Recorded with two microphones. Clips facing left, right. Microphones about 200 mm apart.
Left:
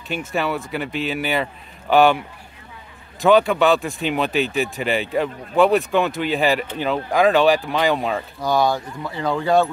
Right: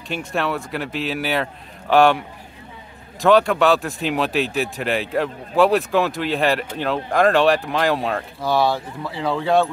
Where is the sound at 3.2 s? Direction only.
Centre (ahead or behind).